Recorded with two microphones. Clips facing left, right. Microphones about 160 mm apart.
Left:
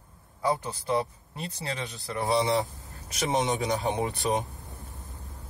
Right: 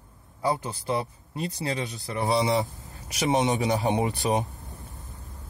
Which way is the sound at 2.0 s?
20° right (ahead or behind).